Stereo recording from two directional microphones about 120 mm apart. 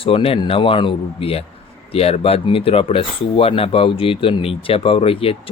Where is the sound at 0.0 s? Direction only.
50° left (ahead or behind).